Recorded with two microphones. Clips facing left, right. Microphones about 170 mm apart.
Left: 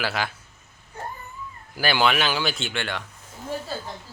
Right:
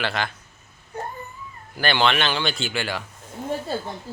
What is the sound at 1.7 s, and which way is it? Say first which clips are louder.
Speech: right 1 dB; 5° left (ahead or behind).